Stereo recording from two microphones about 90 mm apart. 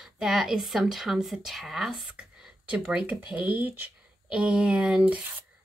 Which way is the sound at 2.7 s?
15° right (ahead or behind).